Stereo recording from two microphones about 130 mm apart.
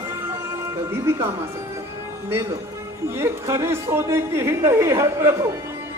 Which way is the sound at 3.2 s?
20° right (ahead or behind).